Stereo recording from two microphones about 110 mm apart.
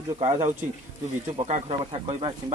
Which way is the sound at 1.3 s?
65° right (ahead or behind).